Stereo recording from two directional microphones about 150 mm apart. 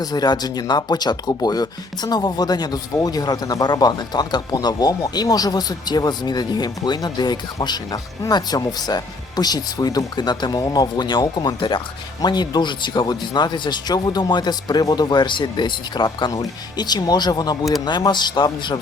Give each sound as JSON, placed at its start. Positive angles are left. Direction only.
{"t": 0.0, "sound": "a man's voice", "side_deg": 25}